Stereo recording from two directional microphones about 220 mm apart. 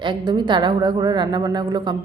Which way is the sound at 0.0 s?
20° right (ahead or behind).